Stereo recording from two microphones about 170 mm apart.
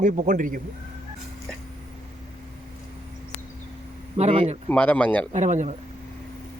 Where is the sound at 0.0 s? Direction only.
50° right (ahead or behind).